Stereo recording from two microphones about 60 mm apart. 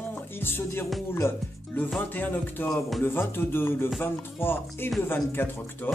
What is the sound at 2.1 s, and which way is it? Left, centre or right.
A man's voice, left.